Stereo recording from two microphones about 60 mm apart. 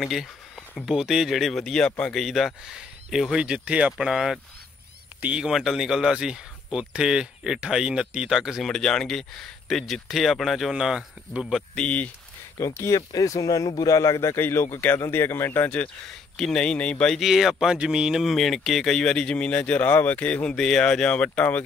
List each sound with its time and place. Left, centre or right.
0.0 s speech: centre
1.6 s speech: centre
2.1 s speech: centre
3.3 s speech: centre
5.4 s speech: centre
8.6 s speech: centre
11.7 s speech: centre
12.5 s speech: left
14.3 s speech: left
16.1 s speech: centre
17.2 s speech: centre
18.2 s speech: centre; by 20.5 s left
20.5 s speech: centre